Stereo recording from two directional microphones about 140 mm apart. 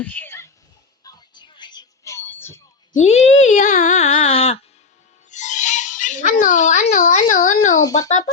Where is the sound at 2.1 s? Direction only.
15° left (ahead or behind).